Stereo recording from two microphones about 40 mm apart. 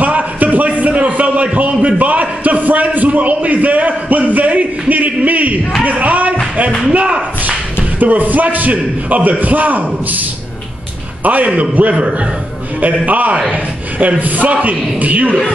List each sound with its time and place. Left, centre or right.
0.0 s a sound: right
8.0 s a man's voice: right
11.2 s a man's voice: right
11.9 s a man's voice: right
12.8 s a man's voice: right